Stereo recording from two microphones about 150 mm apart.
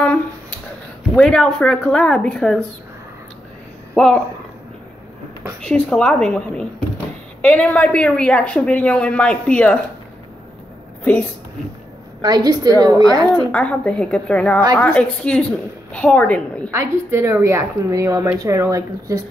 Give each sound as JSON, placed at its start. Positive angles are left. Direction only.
{"t": 1.1, "sound": "a woman's voice", "side_deg": 5}
{"t": 3.9, "sound": "speech", "side_deg": 5}
{"t": 5.6, "sound": "a woman's voice", "side_deg": 5}
{"t": 12.2, "sound": "a woman's voice", "side_deg": -25}
{"t": 13.5, "sound": "a woman's voice", "side_deg": 5}
{"t": 16.7, "sound": "a woman's voice", "side_deg": -20}